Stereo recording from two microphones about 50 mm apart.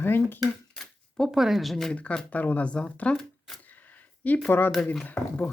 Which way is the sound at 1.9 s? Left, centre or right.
Left.